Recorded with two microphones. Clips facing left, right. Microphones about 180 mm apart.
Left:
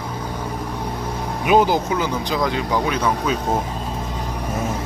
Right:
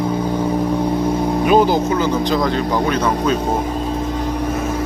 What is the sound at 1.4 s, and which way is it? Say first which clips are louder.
Speech: right 1 dB; 15° left (ahead or behind).